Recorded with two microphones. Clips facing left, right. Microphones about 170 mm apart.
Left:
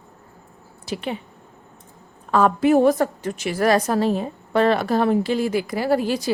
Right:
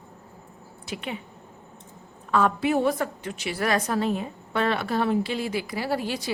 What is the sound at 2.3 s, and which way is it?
A woman's voice, 40° left (ahead or behind).